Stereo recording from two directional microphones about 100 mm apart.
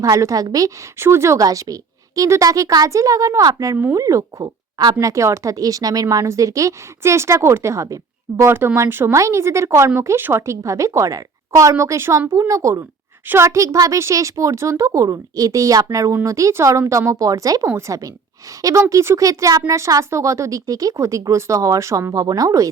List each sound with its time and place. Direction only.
0.0 s speech: 35° right (ahead or behind)
0.9 s speech: 25° right (ahead or behind)